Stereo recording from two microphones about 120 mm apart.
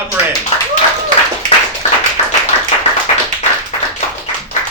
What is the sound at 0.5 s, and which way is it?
Clapping, 60° left (ahead or behind).